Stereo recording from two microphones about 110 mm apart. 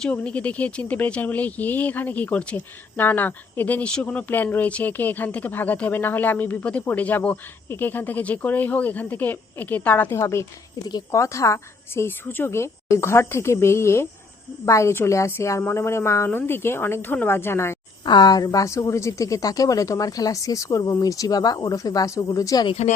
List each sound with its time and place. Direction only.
0.0 s a woman's voice: 10° left (ahead or behind)
18.0 s speech: 40° left (ahead or behind)
22.6 s speech: 75° left (ahead or behind)